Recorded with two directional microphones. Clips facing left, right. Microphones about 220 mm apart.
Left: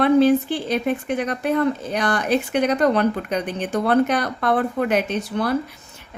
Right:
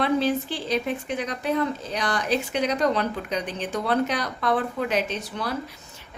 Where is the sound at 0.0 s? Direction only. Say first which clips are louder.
Left 8 dB; 55° left (ahead or behind).